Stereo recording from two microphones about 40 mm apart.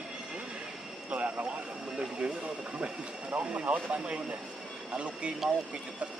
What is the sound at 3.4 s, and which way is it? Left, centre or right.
Speech, right.